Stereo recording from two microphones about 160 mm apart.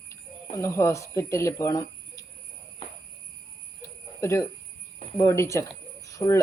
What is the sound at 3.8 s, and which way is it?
Cricket, 20° left (ahead or behind).